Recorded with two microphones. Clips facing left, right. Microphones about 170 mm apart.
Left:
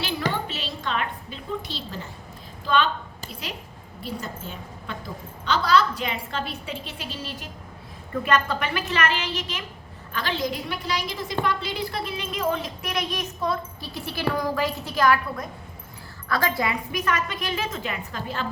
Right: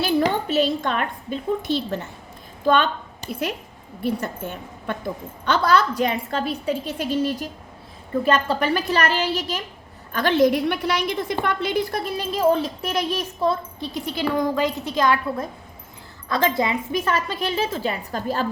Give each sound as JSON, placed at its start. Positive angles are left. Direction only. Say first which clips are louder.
{"t": 0.0, "sound": "a child's voice", "louder": "right 7 dB", "side_deg": -45}
{"t": 4.0, "sound": "a woman's voice", "louder": "right 8 dB", "side_deg": -55}
{"t": 8.1, "sound": "a woman's voice", "louder": "right 4 dB", "side_deg": -30}
{"t": 10.1, "sound": "a woman's voice", "louder": "right 10 dB", "side_deg": -50}